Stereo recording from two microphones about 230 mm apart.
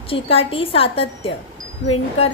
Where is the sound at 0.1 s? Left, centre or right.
Left.